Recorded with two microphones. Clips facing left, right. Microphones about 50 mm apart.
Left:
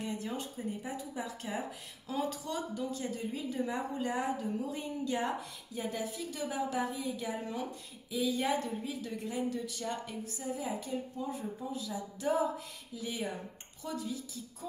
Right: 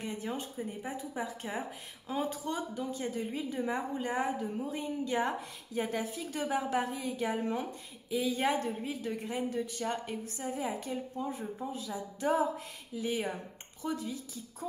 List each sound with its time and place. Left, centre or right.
0.0 s a woman's voice: right